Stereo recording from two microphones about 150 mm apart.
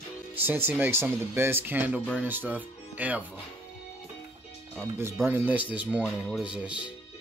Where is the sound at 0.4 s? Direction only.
15° right (ahead or behind).